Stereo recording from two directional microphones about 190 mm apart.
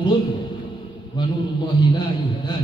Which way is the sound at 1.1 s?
20° left (ahead or behind).